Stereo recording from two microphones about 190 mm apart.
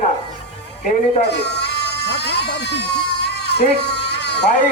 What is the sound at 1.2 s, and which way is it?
Cat, 60° left (ahead or behind).